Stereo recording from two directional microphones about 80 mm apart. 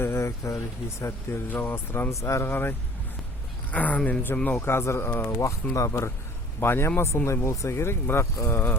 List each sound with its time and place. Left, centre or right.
0.0 s speech: left
1.5 s speech: left